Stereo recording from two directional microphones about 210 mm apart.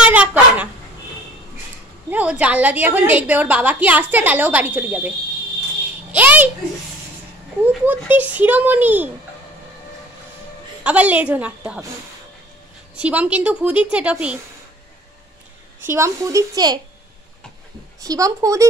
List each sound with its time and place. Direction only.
0.0 s dog: 5° right (ahead or behind)
2.0 s a woman's voice: 5° right (ahead or behind)
6.1 s a woman's voice: 10° right (ahead or behind)
7.5 s a woman's voice: 10° right (ahead or behind)
10.8 s a woman's voice: 5° right (ahead or behind)
13.0 s a woman's voice: 5° right (ahead or behind)
15.8 s a woman's voice: 15° right (ahead or behind)
18.0 s a woman's voice: 15° right (ahead or behind)